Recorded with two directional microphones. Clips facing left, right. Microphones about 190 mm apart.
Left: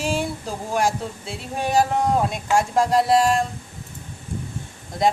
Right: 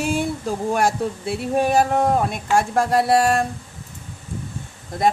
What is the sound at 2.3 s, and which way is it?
A woman's voice, 55° right (ahead or behind).